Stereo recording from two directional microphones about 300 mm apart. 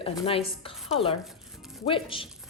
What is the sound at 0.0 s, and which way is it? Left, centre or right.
A woman's voice, centre.